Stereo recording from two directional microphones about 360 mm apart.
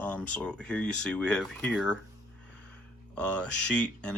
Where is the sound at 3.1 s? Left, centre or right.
Centre.